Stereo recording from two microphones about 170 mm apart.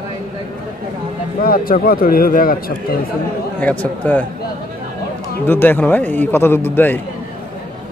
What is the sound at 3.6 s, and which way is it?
Speech, 10° left (ahead or behind).